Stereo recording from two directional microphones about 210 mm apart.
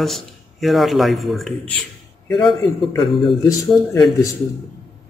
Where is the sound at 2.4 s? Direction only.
20° left (ahead or behind).